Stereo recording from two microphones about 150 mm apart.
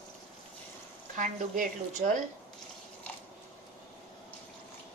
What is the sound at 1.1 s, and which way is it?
Speech, 60° right (ahead or behind).